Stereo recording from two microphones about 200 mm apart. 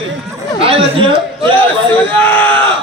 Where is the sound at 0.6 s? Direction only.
30° right (ahead or behind).